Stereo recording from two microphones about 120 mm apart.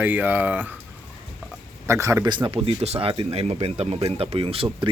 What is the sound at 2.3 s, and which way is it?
Speech, 45° right (ahead or behind).